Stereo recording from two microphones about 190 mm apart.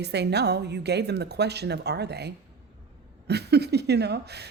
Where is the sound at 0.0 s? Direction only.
60° right (ahead or behind).